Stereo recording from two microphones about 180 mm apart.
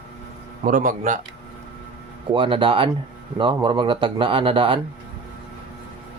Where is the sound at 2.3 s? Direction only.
30° right (ahead or behind).